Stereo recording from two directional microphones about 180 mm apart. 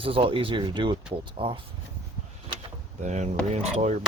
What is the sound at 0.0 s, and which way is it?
Speech, 30° right (ahead or behind).